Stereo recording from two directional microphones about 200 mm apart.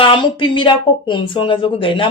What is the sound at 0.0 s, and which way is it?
Speech, 25° left (ahead or behind).